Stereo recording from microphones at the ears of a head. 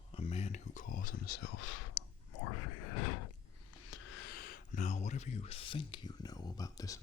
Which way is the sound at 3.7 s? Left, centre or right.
Left.